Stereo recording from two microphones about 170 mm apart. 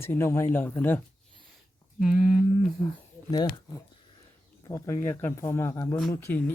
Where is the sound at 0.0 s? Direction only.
15° left (ahead or behind).